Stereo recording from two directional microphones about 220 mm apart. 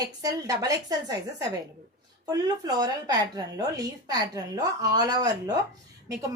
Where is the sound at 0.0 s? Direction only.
15° right (ahead or behind).